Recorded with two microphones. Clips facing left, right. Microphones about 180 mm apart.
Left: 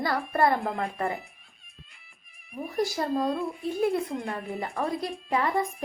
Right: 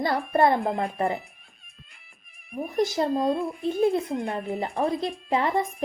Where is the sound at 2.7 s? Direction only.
20° right (ahead or behind).